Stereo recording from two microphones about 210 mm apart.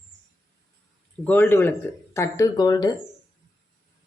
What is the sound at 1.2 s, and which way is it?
Speech, 10° left (ahead or behind).